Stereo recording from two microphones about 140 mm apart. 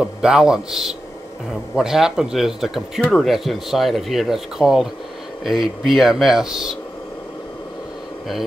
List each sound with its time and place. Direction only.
0.0 s speech: 5° right (ahead or behind)